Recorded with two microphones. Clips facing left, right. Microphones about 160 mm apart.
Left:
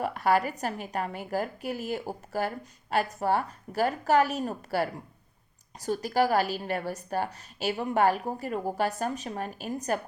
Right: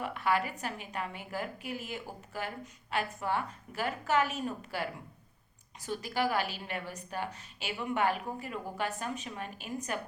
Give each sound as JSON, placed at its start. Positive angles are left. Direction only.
{"t": 0.0, "sound": "a woman's voice", "side_deg": 40}